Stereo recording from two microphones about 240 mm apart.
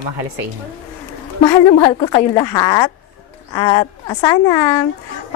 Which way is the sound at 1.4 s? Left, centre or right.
Centre.